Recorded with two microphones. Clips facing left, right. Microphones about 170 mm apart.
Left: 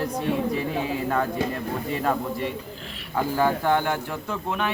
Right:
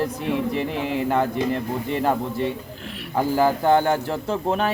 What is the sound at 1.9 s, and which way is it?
A man's voice, 25° right (ahead or behind).